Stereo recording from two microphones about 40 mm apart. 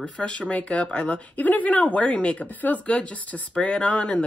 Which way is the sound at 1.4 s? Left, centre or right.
Left.